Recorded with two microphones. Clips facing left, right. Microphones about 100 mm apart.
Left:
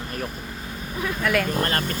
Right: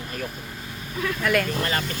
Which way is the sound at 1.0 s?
20° left (ahead or behind).